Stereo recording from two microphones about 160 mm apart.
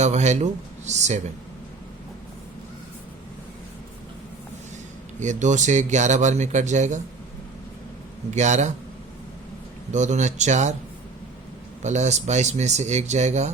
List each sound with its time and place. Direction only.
0.0 s speech: 45° right (ahead or behind)
5.2 s speech: 50° right (ahead or behind)
8.3 s speech: 45° right (ahead or behind)
9.9 s speech: 50° right (ahead or behind)
11.8 s speech: 45° right (ahead or behind)